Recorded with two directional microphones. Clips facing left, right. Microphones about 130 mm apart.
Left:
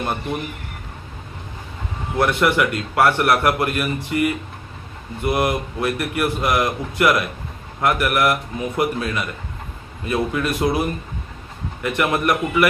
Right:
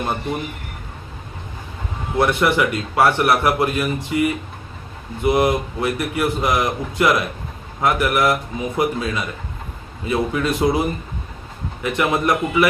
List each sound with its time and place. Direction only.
2.1 s a man's voice: 15° right (ahead or behind)